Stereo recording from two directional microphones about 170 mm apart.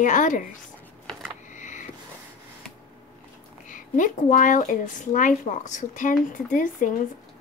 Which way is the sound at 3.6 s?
50° left (ahead or behind).